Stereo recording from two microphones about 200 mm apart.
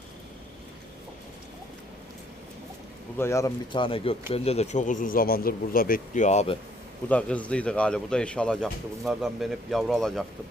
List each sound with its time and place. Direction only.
3.2 s speech: 15° left (ahead or behind); by 6.6 s 30° left (ahead or behind)
7.1 s a man's voice: 5° left (ahead or behind)